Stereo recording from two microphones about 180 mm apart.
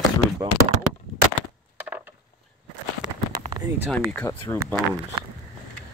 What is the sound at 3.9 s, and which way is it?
Speech, 5° left (ahead or behind).